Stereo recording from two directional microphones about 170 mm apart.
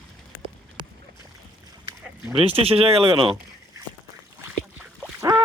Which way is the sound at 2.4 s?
35° right (ahead or behind).